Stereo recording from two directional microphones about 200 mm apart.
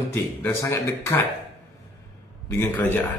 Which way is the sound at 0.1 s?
10° left (ahead or behind).